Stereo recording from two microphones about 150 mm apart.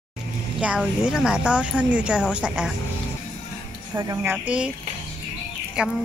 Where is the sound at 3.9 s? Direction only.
25° right (ahead or behind).